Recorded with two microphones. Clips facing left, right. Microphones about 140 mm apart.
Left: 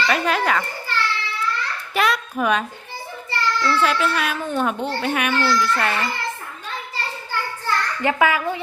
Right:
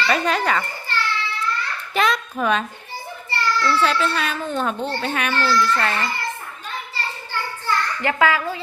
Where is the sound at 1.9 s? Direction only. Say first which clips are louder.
Even; 5° left (ahead or behind).